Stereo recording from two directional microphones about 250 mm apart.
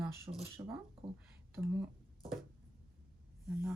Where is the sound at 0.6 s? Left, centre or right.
Centre.